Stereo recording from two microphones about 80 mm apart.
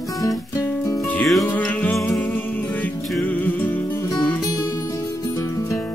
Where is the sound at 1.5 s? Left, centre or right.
Centre.